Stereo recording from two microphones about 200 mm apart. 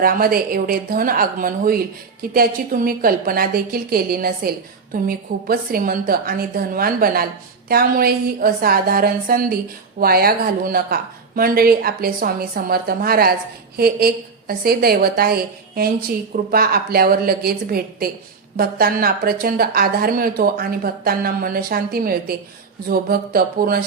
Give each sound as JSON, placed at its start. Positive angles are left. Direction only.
{"t": 0.0, "sound": "a woman's voice", "side_deg": -45}